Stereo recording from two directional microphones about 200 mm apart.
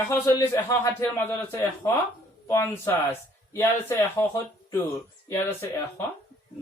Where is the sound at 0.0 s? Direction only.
15° left (ahead or behind).